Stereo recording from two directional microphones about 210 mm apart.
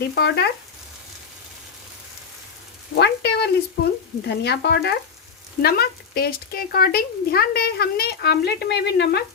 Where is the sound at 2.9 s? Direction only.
55° left (ahead or behind).